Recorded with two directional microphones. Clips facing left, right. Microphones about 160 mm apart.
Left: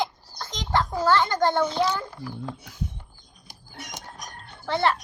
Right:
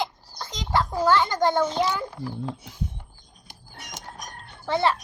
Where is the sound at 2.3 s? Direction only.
25° right (ahead or behind).